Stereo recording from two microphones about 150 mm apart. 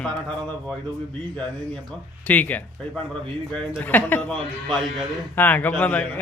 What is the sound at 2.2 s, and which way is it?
Speech, 10° left (ahead or behind).